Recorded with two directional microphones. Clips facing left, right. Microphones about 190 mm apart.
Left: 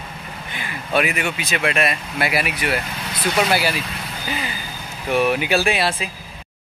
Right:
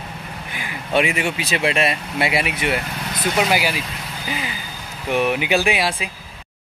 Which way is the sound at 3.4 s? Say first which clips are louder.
Even; 15° right (ahead or behind).